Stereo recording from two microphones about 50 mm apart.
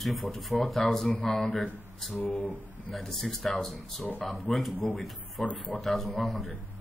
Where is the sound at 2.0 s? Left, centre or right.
Centre.